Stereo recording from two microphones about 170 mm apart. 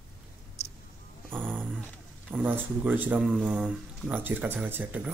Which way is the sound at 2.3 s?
10° right (ahead or behind).